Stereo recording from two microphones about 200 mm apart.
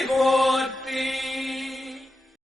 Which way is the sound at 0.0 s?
Centre (ahead or behind).